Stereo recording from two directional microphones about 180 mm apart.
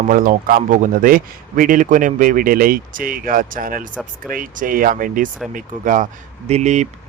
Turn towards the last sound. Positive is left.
turn(degrees=-40)  # may be behind; listen again after turning